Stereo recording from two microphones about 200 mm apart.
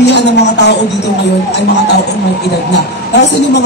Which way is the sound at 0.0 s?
60° left (ahead or behind).